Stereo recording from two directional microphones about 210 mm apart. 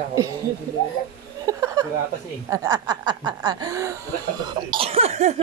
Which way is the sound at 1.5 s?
15° right (ahead or behind).